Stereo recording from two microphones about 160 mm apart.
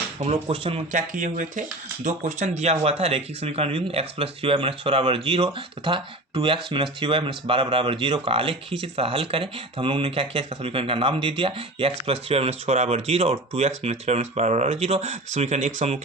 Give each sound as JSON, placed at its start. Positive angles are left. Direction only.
{"t": 0.2, "sound": "speech", "side_deg": -40}
{"t": 0.9, "sound": "speech", "side_deg": -55}